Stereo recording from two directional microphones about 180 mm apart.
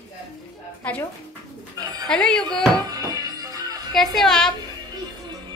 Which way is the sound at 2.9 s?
20° right (ahead or behind).